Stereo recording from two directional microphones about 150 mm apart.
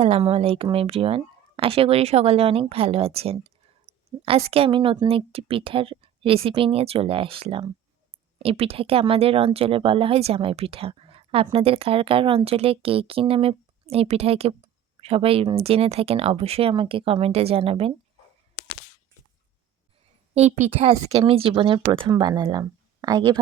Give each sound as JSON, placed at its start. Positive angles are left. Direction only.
{"t": 0.0, "sound": "speech", "side_deg": -40}
{"t": 20.3, "sound": "speech", "side_deg": -45}